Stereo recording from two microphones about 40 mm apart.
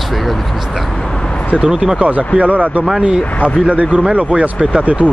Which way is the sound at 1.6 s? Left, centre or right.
Right.